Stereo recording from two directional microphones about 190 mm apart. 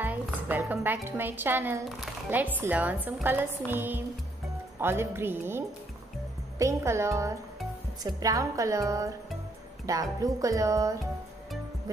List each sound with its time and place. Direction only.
0.0 s a woman's voice: 10° right (ahead or behind)
6.6 s a woman's voice: 15° right (ahead or behind)